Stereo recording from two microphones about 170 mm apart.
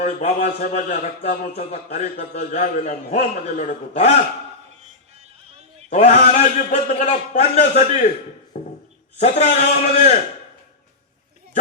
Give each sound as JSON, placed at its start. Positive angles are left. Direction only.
{"t": 0.0, "sound": "a man's voice", "side_deg": 40}
{"t": 5.9, "sound": "a man's voice", "side_deg": 40}
{"t": 8.5, "sound": "a sound", "side_deg": 40}
{"t": 9.1, "sound": "a man's voice", "side_deg": 40}